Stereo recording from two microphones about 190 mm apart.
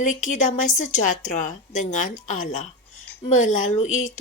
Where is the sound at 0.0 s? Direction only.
40° left (ahead or behind).